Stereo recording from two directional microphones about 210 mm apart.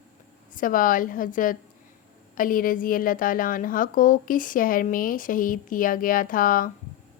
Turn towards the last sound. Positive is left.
turn(degrees=40)  # may be behind; listen again after turning